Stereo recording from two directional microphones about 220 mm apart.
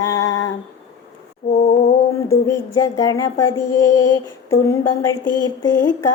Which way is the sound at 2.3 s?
15° left (ahead or behind).